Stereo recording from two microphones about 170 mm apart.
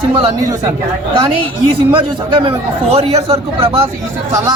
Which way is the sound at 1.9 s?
30° right (ahead or behind).